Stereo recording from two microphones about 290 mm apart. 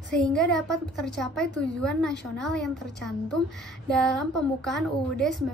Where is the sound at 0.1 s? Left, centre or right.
Centre.